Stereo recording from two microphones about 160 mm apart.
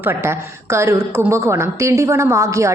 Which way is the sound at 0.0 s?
15° right (ahead or behind).